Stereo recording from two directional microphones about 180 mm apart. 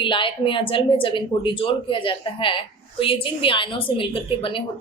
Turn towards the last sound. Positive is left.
turn(degrees=30)  # may be behind; listen again after turning